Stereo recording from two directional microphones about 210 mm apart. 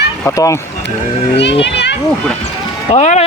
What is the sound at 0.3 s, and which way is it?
Speech, 15° left (ahead or behind).